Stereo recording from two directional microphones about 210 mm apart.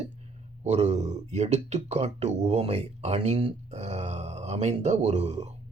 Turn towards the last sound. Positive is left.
turn(degrees=-30)  # may be behind; listen again after turning